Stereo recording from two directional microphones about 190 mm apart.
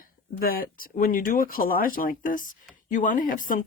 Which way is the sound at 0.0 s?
50° left (ahead or behind).